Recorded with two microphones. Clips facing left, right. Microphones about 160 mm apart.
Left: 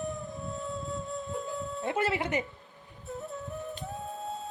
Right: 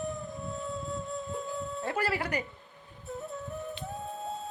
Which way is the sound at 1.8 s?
20° left (ahead or behind).